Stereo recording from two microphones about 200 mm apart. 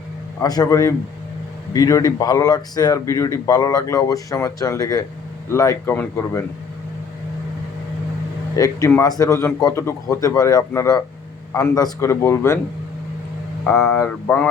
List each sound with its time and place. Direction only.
0.3 s speech: 20° left (ahead or behind)
8.5 s speech: 15° left (ahead or behind)
13.7 s mantra: 5° left (ahead or behind)